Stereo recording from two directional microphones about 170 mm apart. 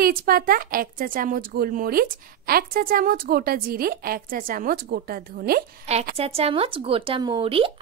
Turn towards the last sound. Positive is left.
turn(degrees=-30)  # may be behind; listen again after turning